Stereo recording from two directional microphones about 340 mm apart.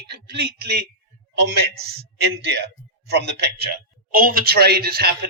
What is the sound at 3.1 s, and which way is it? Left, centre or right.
Speech, right.